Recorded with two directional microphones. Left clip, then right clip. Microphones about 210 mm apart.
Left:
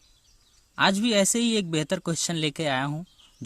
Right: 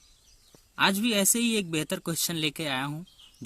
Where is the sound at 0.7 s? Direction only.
40° left (ahead or behind).